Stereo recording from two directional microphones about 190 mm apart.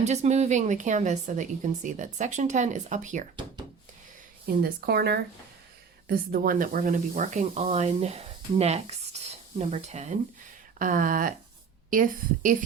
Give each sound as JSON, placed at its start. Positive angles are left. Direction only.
{"t": 0.0, "sound": "a woman's voice", "side_deg": -35}
{"t": 4.4, "sound": "a woman's voice", "side_deg": -55}